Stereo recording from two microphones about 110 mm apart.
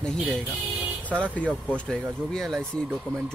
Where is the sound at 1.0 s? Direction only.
10° left (ahead or behind).